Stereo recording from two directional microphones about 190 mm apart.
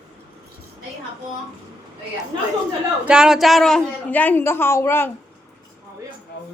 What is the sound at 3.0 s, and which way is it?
A woman's voice, 5° right (ahead or behind).